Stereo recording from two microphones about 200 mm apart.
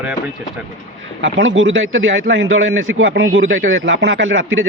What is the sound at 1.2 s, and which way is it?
Speech, 70° right (ahead or behind).